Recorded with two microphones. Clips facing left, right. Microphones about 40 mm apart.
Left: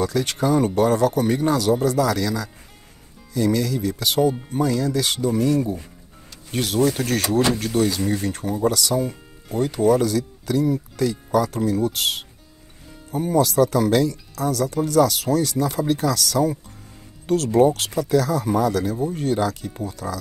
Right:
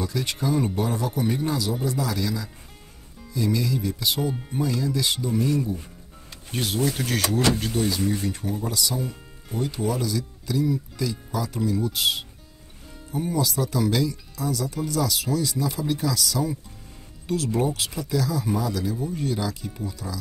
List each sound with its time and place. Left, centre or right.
0.0 s speech: left
7.2 s speech: left
7.5 s speech: left
9.0 s speech: left